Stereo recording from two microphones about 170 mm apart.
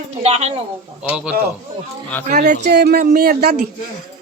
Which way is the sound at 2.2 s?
50° right (ahead or behind).